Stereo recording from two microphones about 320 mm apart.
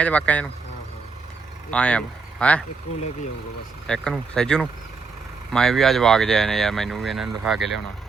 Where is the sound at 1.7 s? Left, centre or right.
Centre.